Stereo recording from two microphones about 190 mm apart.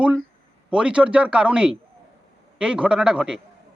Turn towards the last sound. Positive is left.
turn(degrees=-5)  # may be behind; listen again after turning